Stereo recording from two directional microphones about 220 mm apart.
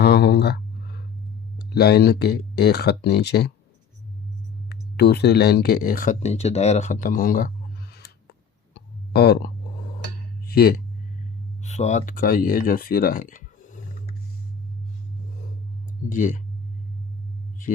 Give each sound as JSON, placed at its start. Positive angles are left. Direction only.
{"t": 0.0, "sound": "a sound", "side_deg": 50}
{"t": 1.5, "sound": "speech", "side_deg": 45}
{"t": 4.7, "sound": "speech", "side_deg": 50}
{"t": 7.9, "sound": "clicking", "side_deg": 45}
{"t": 10.4, "sound": "a sound", "side_deg": 45}
{"t": 11.6, "sound": "speech", "side_deg": 30}
{"t": 16.0, "sound": "speech", "side_deg": 35}